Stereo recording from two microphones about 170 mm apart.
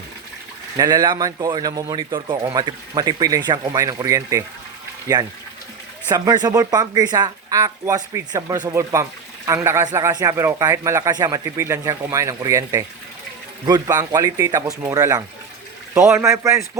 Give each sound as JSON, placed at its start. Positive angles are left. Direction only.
{"t": 0.8, "sound": "a man's voice", "side_deg": -20}
{"t": 6.1, "sound": "a man's voice", "side_deg": -20}